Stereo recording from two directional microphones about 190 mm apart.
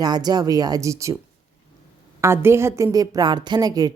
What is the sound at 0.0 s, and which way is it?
A woman's voice, 20° right (ahead or behind).